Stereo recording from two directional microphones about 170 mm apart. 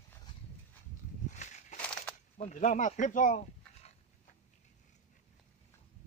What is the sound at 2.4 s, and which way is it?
Speech, 45° left (ahead or behind).